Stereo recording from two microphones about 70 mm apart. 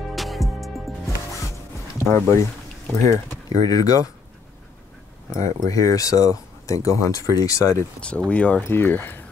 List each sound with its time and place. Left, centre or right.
0.1 s music: centre
2.0 s speech: left
3.1 s speech: left
5.4 s speech: left
8.0 s speech: centre
8.6 s speech: left